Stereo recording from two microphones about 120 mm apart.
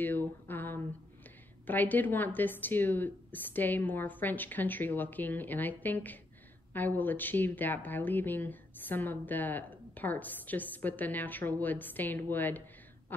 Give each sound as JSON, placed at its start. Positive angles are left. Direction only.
{"t": 0.0, "sound": "speech", "side_deg": 15}